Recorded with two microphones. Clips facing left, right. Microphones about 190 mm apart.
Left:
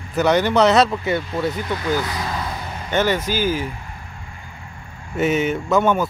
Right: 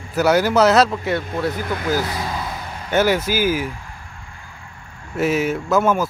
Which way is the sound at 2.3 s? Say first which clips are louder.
Even; 5° right (ahead or behind).